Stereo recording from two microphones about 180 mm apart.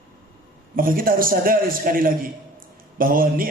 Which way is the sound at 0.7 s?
50° right (ahead or behind).